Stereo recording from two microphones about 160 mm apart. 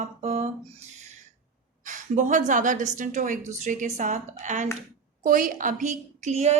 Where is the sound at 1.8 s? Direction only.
50° right (ahead or behind).